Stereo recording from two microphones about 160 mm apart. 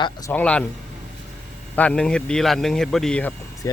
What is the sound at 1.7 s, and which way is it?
Speech, 10° left (ahead or behind).